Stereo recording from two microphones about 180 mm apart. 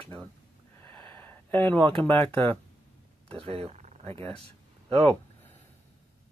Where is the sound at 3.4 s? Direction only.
30° right (ahead or behind).